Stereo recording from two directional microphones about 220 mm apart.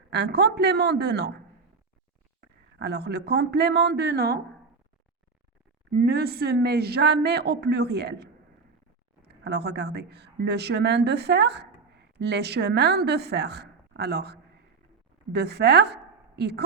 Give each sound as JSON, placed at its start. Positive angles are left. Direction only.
{"t": 0.1, "sound": "speech", "side_deg": -50}
{"t": 2.7, "sound": "speech", "side_deg": -50}
{"t": 5.9, "sound": "a woman's voice", "side_deg": -45}